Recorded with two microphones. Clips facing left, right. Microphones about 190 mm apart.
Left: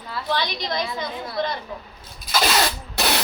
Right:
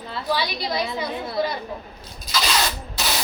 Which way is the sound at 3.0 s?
60° left (ahead or behind).